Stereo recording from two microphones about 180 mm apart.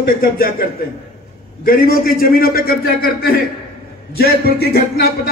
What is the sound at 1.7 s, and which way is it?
A man's voice, 55° left (ahead or behind).